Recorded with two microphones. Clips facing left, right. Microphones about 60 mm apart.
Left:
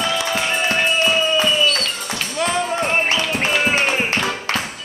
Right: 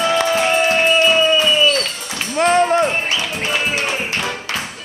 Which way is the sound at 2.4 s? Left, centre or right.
Right.